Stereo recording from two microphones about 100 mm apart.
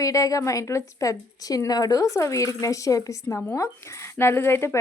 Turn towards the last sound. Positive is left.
turn(degrees=25)  # may be behind; listen again after turning